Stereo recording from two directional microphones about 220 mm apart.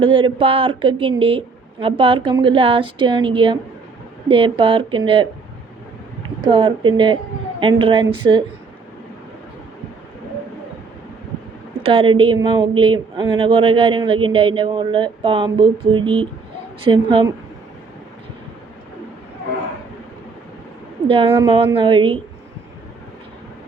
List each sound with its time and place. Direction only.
0.0 s a woman's voice: 25° right (ahead or behind)
6.4 s a woman's voice: 20° right (ahead or behind)
11.8 s a woman's voice: 25° right (ahead or behind)
21.5 s a woman's voice: 25° right (ahead or behind)